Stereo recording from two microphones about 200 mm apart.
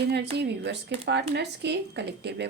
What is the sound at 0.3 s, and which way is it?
Speech, 60° right (ahead or behind).